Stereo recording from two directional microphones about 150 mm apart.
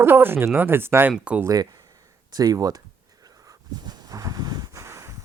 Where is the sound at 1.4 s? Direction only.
25° right (ahead or behind).